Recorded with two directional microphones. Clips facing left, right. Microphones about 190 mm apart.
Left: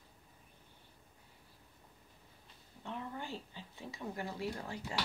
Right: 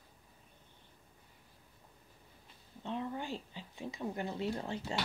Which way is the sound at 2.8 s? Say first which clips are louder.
Right 5 dB; 20° right (ahead or behind).